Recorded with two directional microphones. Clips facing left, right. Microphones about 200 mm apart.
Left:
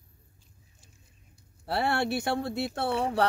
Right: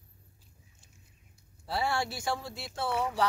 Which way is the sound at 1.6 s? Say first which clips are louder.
Left 4 dB; 65° left (ahead or behind).